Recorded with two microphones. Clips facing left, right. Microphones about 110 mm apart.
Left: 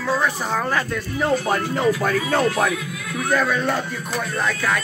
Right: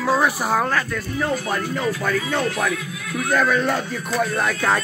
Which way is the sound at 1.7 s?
35° left (ahead or behind).